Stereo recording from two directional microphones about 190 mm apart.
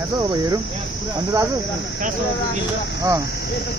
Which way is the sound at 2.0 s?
45° right (ahead or behind).